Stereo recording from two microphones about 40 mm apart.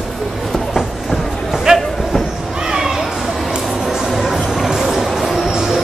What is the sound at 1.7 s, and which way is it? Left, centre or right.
Speech, centre.